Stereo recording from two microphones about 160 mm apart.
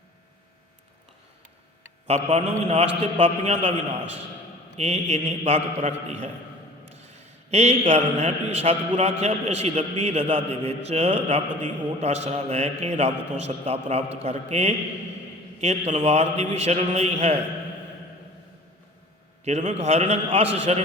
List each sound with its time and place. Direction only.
2.0 s a man's voice: 40° right (ahead or behind)
4.8 s a man's voice: 45° right (ahead or behind)
19.5 s a man's voice: 45° right (ahead or behind)